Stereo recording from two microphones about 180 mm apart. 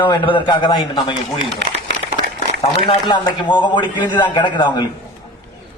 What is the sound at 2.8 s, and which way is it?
A man's voice, 25° left (ahead or behind).